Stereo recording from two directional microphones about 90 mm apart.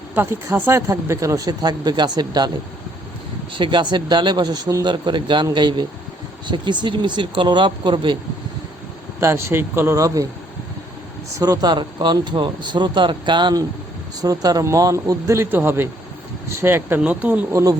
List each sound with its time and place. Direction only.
0.1 s speech: 25° right (ahead or behind); by 2.5 s 50° right (ahead or behind)
3.5 s speech: 60° right (ahead or behind)
9.2 s speech: 30° right (ahead or behind)
11.3 s speech: 40° right (ahead or behind); by 13.6 s 60° right (ahead or behind)
14.2 s a man's voice: 45° right (ahead or behind); by 17.0 s 25° right (ahead or behind)
17.0 s speech: 15° right (ahead or behind)
17.5 s a man's voice: 35° right (ahead or behind)